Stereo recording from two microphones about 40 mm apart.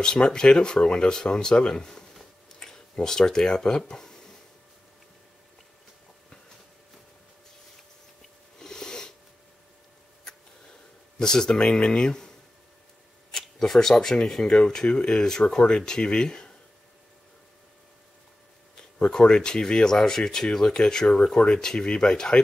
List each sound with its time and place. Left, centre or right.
0.0 s speech: centre
8.5 s a sound: centre
11.1 s speech: centre
13.6 s speech: centre
18.8 s speech: centre